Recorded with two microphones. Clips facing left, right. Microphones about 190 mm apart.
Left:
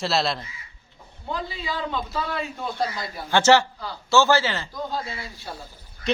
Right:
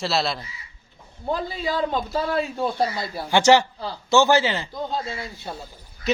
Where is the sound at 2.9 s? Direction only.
30° right (ahead or behind).